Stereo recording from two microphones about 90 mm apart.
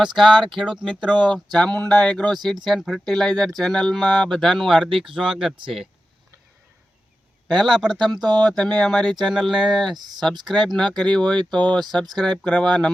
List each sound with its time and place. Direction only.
0.0 s speech: 5° right (ahead or behind)
1.5 s speech: 15° left (ahead or behind)
7.5 s speech: centre (ahead or behind)
10.0 s speech: 50° right (ahead or behind)
10.5 s speech: 5° left (ahead or behind)